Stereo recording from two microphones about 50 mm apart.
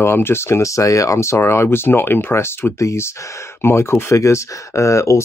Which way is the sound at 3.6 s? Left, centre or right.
Left.